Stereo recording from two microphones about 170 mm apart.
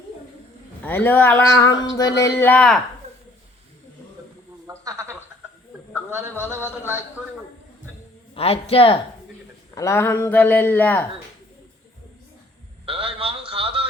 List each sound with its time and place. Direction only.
0.8 s speech: 10° left (ahead or behind)
2.4 s speech: 10° left (ahead or behind)
4.6 s a sound: 20° right (ahead or behind)
6.4 s speech: 10° right (ahead or behind)
8.4 s speech: 35° left (ahead or behind)
9.7 s speech: 15° left (ahead or behind)
12.8 s a sound: 30° right (ahead or behind)